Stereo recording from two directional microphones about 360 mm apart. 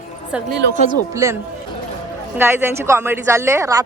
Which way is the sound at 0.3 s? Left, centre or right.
Centre.